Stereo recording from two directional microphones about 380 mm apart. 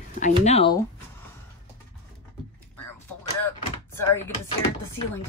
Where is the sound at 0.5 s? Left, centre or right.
Centre.